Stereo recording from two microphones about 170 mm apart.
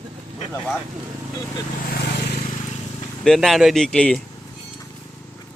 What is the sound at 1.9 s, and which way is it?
Vehicle, 70° left (ahead or behind).